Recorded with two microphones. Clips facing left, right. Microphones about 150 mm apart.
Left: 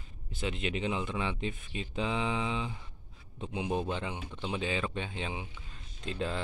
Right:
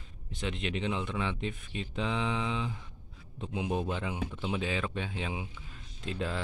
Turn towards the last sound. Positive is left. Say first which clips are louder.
# even
turn(degrees=0)  # may be behind; listen again after turning